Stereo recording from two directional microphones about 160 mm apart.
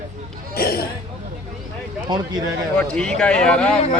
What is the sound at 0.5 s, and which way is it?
Speech, 70° left (ahead or behind).